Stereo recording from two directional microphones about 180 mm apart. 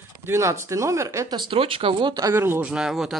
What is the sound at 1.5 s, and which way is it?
Speech, 30° right (ahead or behind).